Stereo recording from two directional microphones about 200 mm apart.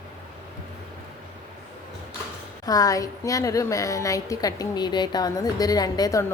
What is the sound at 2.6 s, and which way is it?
A woman's voice, 15° left (ahead or behind).